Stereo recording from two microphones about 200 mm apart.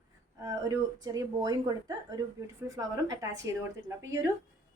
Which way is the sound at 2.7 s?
15° right (ahead or behind).